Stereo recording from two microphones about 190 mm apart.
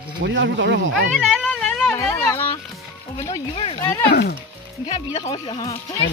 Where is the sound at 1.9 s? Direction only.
15° left (ahead or behind).